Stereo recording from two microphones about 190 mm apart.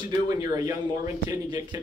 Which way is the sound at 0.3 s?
20° right (ahead or behind).